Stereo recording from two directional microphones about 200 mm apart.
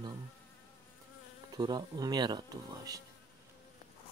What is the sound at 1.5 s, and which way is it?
Speech, 20° right (ahead or behind).